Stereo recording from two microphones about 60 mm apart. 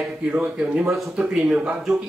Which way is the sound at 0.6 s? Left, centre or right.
Right.